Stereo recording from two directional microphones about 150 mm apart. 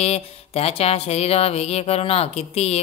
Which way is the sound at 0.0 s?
45° left (ahead or behind).